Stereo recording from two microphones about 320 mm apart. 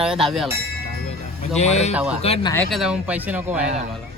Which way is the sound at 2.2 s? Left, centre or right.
Centre.